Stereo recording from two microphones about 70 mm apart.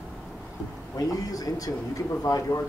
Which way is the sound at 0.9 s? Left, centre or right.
Left.